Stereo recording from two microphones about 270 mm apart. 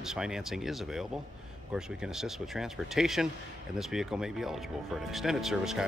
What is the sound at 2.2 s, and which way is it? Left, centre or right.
Speech, centre.